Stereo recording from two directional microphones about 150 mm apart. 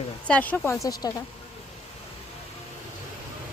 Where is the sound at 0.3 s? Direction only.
10° left (ahead or behind).